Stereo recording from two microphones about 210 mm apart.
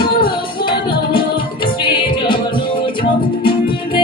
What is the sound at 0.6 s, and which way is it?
Music, 25° left (ahead or behind).